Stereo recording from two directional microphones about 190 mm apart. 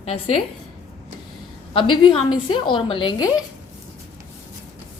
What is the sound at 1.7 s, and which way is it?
A woman's voice, 25° left (ahead or behind).